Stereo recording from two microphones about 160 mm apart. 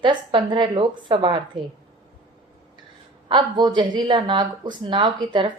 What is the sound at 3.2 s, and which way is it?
A woman's voice, 30° right (ahead or behind).